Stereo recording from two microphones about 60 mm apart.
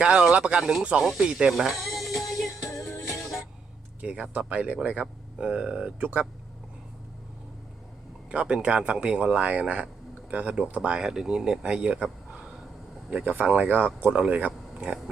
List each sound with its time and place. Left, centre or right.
0.0 s speech: centre
1.0 s speech: centre
1.5 s music: centre
4.0 s speech: right
8.3 s speech: centre